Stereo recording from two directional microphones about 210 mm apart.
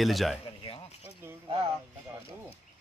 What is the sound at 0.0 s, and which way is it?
Speech, centre (ahead or behind).